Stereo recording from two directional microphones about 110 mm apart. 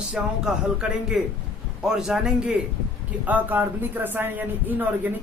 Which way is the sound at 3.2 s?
15° right (ahead or behind).